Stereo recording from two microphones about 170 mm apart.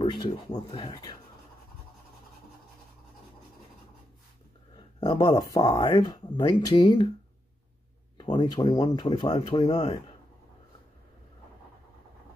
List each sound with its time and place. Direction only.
0.0 s speech: 30° left (ahead or behind)
5.0 s speech: 25° left (ahead or behind)
8.2 s speech: 25° left (ahead or behind)